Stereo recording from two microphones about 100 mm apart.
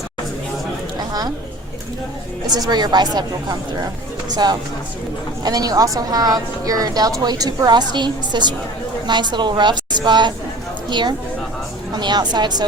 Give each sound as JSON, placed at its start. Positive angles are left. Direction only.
{"t": 0.9, "sound": "a sound", "side_deg": -40}
{"t": 2.5, "sound": "a woman's voice", "side_deg": -45}
{"t": 5.4, "sound": "a woman's voice", "side_deg": -40}